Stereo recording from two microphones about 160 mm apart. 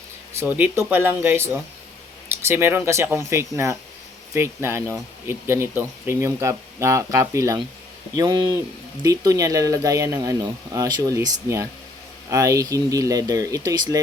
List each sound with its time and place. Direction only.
0.3 s speech: 10° right (ahead or behind)